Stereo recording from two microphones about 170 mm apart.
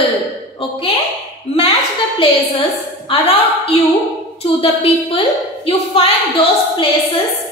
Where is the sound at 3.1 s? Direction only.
35° left (ahead or behind).